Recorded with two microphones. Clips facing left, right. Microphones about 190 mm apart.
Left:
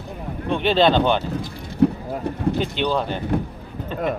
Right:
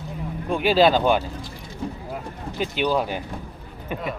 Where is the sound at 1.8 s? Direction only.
65° left (ahead or behind).